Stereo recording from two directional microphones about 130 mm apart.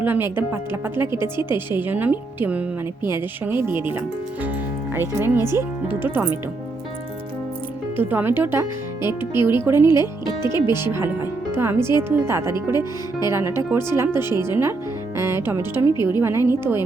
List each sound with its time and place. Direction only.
0.0 s speech: 15° right (ahead or behind)
4.9 s speech: 15° right (ahead or behind)
7.9 s speech: 15° right (ahead or behind)
10.2 s speech: 30° left (ahead or behind)
10.7 s speech: 20° right (ahead or behind)